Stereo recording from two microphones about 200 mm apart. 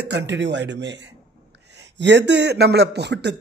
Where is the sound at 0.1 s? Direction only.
60° right (ahead or behind).